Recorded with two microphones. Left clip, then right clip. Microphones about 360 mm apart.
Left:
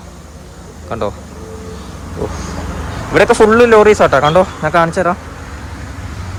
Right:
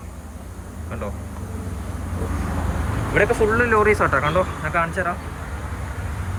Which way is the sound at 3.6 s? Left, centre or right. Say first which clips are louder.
Left 10 dB; centre.